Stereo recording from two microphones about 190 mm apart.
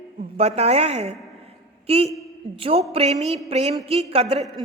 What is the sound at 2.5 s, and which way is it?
A woman's voice, 30° right (ahead or behind).